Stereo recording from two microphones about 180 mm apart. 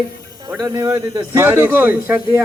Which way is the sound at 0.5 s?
20° right (ahead or behind).